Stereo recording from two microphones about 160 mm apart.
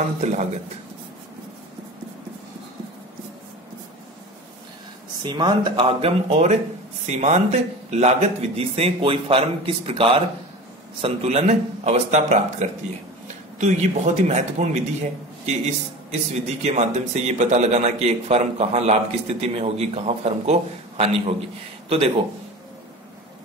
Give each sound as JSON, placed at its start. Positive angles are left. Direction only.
{"t": 5.2, "sound": "a man's voice", "side_deg": -25}